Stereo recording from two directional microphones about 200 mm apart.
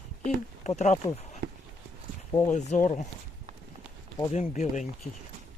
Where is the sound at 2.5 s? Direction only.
40° left (ahead or behind).